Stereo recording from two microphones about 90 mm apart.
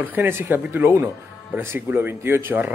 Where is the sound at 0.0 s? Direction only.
20° right (ahead or behind).